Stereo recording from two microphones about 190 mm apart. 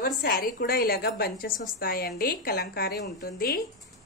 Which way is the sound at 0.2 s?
50° left (ahead or behind).